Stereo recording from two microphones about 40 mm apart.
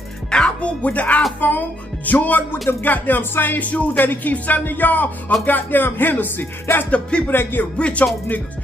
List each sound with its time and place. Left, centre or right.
0.3 s speech: left
0.8 s speech: left
3.5 s speech: left
4.0 s speech: left
6.9 s speech: left
7.2 s speech: left
7.7 s speech: left